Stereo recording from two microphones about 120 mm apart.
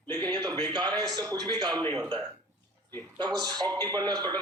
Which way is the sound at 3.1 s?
35° right (ahead or behind).